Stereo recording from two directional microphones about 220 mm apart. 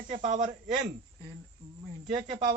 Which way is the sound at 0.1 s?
30° right (ahead or behind).